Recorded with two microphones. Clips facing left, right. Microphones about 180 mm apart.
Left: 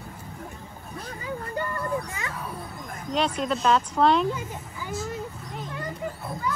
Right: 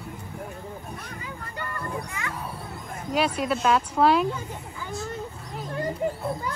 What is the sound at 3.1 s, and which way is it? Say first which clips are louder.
Speech: right 1 dB; 5° right (ahead or behind).